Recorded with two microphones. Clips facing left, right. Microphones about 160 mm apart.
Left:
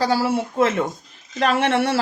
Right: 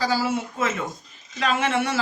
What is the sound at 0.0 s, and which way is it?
Speech, 65° left (ahead or behind).